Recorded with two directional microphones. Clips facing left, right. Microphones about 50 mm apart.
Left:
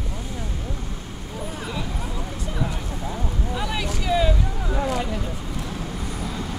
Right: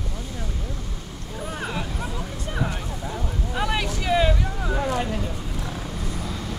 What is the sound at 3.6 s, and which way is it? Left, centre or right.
Vehicle, right.